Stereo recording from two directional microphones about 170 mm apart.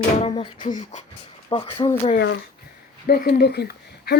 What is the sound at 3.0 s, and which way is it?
Speech, 65° left (ahead or behind).